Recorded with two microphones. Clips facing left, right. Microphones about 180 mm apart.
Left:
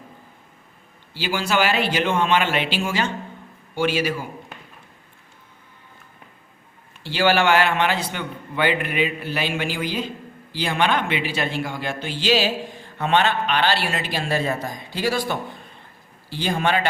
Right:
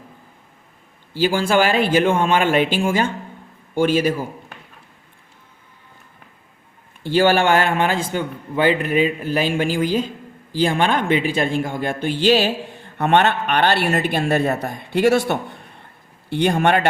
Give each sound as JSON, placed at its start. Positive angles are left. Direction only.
{"t": 1.1, "sound": "speech", "side_deg": -50}
{"t": 7.0, "sound": "speech", "side_deg": -50}